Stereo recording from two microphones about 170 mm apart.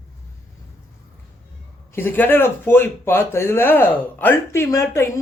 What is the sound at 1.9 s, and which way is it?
Speech, 10° left (ahead or behind).